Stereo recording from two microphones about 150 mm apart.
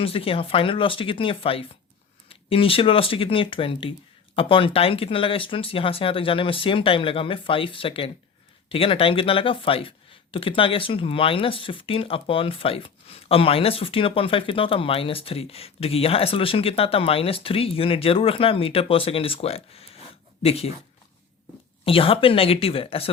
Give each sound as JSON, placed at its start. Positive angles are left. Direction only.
{"t": 0.0, "sound": "speech", "side_deg": 40}
{"t": 21.8, "sound": "speech", "side_deg": 35}